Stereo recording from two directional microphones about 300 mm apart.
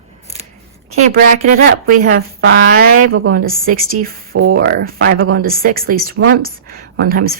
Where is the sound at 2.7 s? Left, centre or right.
Right.